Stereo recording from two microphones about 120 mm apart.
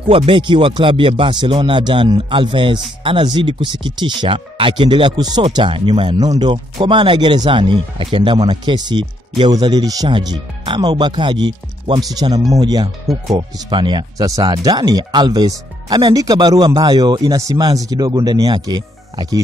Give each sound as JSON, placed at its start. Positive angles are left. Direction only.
{"t": 0.1, "sound": "speech", "side_deg": -45}